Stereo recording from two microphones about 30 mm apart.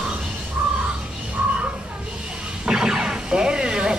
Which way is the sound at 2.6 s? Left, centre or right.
Right.